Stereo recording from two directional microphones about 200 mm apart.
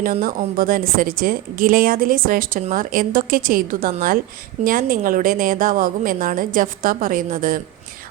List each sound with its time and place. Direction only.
0.0 s a woman's voice: 45° right (ahead or behind)